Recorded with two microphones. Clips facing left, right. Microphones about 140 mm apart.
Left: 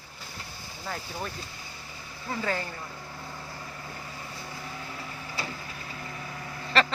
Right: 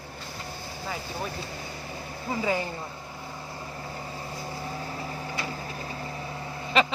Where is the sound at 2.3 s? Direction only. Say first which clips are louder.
Right 3 dB; 15° right (ahead or behind).